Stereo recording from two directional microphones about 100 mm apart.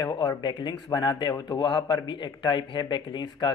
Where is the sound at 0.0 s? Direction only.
45° left (ahead or behind).